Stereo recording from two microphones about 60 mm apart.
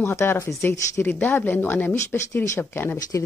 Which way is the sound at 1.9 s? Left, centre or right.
Left.